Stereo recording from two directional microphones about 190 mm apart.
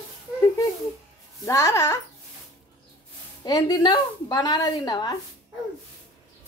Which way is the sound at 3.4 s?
20° left (ahead or behind).